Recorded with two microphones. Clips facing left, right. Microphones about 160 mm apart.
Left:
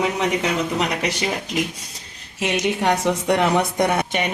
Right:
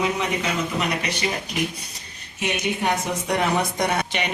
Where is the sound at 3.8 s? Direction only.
50° left (ahead or behind).